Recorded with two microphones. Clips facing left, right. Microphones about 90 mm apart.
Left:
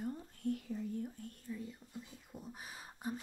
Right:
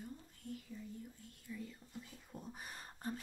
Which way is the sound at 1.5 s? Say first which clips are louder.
Left 2 dB; 20° left (ahead or behind).